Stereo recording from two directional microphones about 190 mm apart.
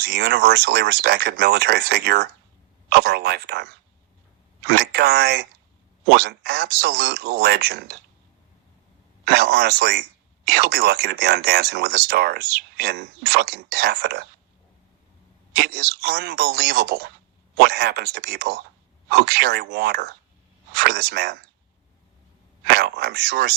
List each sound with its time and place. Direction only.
0.0 s speech: 55° right (ahead or behind)
9.2 s speech: 55° right (ahead or behind)
15.5 s speech: 55° right (ahead or behind)
22.6 s speech: 55° right (ahead or behind)